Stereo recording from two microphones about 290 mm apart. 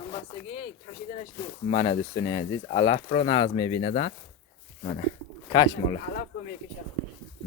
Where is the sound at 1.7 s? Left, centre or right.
Centre.